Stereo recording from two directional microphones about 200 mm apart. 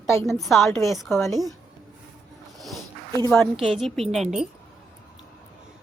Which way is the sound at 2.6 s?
Centre (ahead or behind).